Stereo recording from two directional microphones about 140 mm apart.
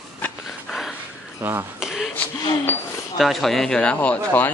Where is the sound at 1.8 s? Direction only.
5° right (ahead or behind).